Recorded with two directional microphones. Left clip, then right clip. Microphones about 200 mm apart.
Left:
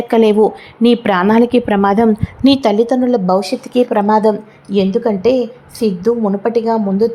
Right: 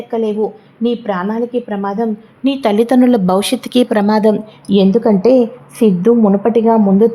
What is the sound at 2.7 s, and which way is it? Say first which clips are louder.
A woman's voice: right 2 dB; 15° right (ahead or behind).